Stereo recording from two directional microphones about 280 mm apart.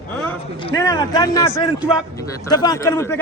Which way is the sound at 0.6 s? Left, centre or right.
Centre.